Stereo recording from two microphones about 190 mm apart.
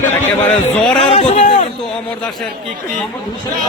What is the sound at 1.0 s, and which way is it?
Speech, 30° left (ahead or behind).